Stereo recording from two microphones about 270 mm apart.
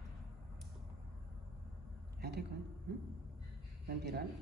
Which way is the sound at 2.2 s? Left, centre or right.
Right.